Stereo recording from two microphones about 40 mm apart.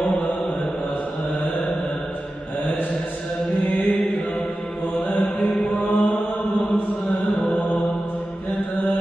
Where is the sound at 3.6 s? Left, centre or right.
Left.